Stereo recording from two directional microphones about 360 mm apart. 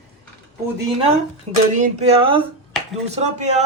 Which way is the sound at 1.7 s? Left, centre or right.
Centre.